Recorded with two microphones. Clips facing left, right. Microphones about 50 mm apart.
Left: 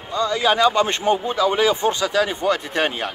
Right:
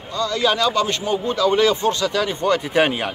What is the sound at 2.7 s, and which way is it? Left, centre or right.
Speech, centre.